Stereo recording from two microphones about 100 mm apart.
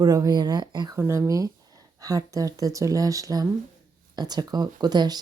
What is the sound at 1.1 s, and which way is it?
Speech, 30° right (ahead or behind).